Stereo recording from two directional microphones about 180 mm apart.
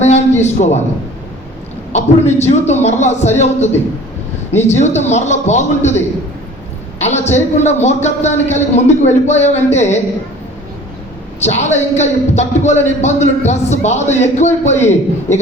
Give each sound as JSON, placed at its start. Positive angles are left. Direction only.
{"t": 0.0, "sound": "a man's voice", "side_deg": 40}
{"t": 1.9, "sound": "a man's voice", "side_deg": 40}
{"t": 7.0, "sound": "a man's voice", "side_deg": 40}
{"t": 11.3, "sound": "a man's voice", "side_deg": 40}